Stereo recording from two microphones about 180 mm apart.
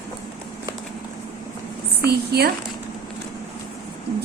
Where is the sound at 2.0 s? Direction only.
60° right (ahead or behind).